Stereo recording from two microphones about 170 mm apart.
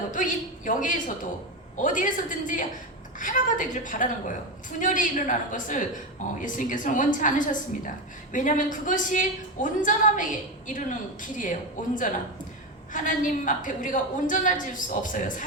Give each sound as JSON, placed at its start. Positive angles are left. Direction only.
{"t": 0.1, "sound": "a woman's voice", "side_deg": 50}
{"t": 12.9, "sound": "a woman's voice", "side_deg": 50}